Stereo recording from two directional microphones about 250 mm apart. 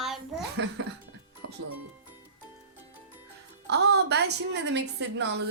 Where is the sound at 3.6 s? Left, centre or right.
Right.